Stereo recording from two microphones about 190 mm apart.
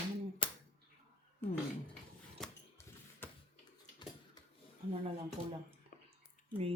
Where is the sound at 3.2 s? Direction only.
10° left (ahead or behind).